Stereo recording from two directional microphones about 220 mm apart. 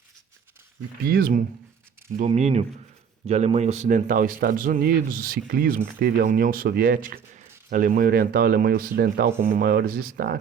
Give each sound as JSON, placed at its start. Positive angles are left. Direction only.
{"t": 1.0, "sound": "a man's voice", "side_deg": -40}